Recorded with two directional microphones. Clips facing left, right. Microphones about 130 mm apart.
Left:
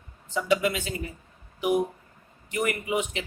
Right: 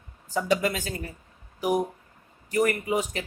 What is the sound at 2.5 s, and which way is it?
Speech, 40° right (ahead or behind).